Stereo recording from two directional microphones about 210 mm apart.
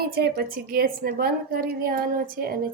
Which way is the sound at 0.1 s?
45° right (ahead or behind).